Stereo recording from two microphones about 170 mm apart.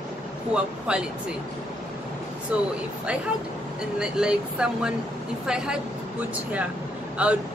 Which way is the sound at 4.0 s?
5° right (ahead or behind).